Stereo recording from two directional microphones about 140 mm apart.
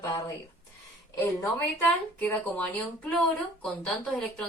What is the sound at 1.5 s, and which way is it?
A woman's voice, 10° left (ahead or behind).